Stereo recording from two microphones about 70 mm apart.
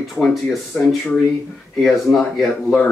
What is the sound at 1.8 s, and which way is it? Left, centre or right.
Speech, centre.